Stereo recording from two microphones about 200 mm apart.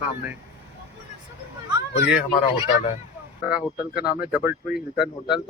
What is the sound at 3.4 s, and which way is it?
Speech, 5° right (ahead or behind).